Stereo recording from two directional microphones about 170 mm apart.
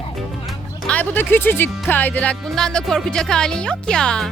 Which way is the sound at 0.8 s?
10° left (ahead or behind).